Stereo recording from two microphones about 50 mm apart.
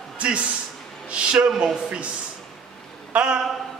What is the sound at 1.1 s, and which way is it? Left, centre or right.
Speech, right.